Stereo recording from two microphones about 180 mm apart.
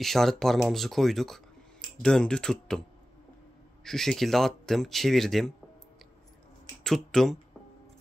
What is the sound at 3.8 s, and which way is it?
Speech, centre (ahead or behind).